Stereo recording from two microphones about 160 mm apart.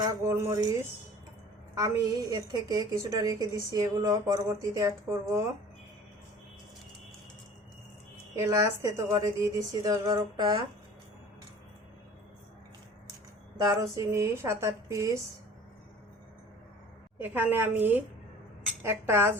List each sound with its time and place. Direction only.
0.0 s a woman's voice: 15° right (ahead or behind)
8.4 s a woman's voice: 20° right (ahead or behind)
13.6 s a woman's voice: 20° right (ahead or behind)
17.2 s speech: 10° right (ahead or behind)